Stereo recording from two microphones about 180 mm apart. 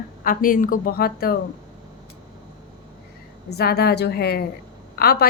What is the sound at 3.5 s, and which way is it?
A woman's voice, 60° left (ahead or behind).